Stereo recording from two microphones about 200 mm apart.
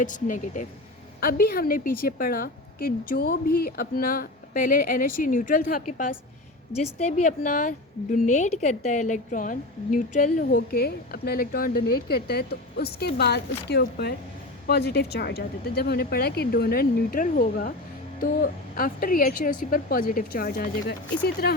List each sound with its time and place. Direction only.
0.0 s a woman's voice: 40° left (ahead or behind)